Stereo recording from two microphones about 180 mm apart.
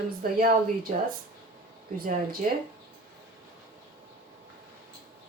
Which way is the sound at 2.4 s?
45° right (ahead or behind).